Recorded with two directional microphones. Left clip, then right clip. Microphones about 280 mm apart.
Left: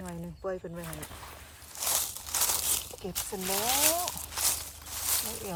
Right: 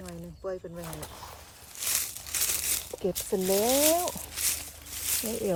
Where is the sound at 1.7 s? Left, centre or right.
Centre.